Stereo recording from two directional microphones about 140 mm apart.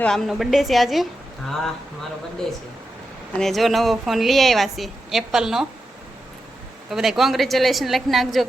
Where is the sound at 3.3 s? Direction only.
Centre (ahead or behind).